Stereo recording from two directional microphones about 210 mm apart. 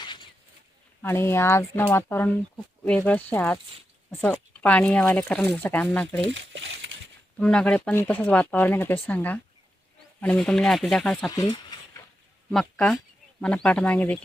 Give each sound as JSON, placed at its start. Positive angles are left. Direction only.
{"t": 0.0, "sound": "a sound", "side_deg": 20}
{"t": 1.0, "sound": "speech", "side_deg": 10}
{"t": 6.2, "sound": "speech", "side_deg": -60}
{"t": 7.3, "sound": "speech", "side_deg": 5}
{"t": 11.3, "sound": "speech", "side_deg": 20}
{"t": 12.5, "sound": "speech", "side_deg": 0}